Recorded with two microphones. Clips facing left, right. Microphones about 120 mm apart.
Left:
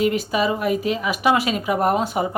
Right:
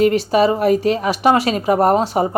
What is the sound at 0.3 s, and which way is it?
Speech, 40° right (ahead or behind).